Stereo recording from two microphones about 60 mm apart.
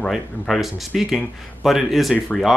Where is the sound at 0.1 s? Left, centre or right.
Centre.